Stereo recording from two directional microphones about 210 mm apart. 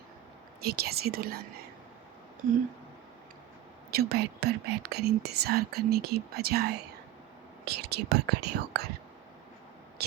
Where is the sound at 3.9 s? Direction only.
50° right (ahead or behind).